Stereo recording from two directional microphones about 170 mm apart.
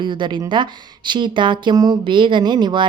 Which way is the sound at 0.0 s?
25° right (ahead or behind).